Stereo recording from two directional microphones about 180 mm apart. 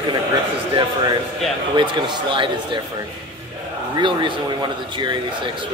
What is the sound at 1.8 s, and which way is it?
A man's voice, 25° right (ahead or behind).